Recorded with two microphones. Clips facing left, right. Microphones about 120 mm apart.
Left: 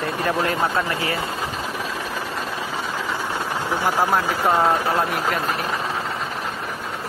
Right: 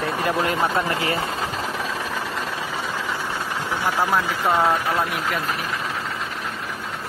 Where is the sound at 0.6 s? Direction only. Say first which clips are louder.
Even; 20° right (ahead or behind).